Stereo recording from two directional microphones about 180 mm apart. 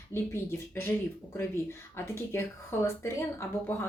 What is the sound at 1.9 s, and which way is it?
Speech, 15° left (ahead or behind).